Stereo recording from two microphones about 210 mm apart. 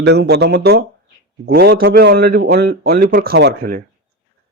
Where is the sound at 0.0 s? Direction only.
55° right (ahead or behind).